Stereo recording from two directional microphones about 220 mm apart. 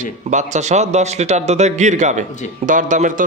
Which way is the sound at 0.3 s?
35° right (ahead or behind).